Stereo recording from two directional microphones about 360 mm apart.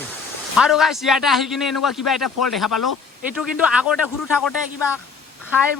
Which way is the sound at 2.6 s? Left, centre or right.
Left.